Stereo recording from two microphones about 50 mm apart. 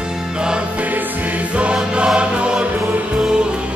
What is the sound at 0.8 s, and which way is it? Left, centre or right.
Music, right.